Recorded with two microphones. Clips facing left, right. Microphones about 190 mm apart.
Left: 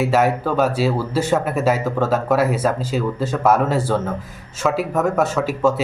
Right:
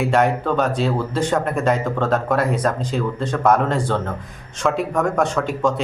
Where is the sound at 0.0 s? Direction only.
5° left (ahead or behind).